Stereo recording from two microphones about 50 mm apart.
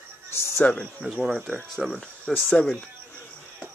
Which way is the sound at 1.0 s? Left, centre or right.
Centre.